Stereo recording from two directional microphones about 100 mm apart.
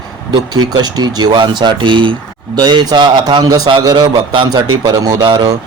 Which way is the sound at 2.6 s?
45° right (ahead or behind).